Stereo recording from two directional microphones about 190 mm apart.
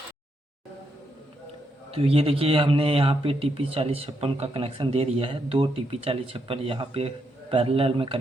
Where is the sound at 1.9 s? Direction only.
30° right (ahead or behind).